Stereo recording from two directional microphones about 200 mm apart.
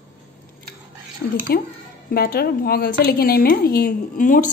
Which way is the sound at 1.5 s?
50° left (ahead or behind).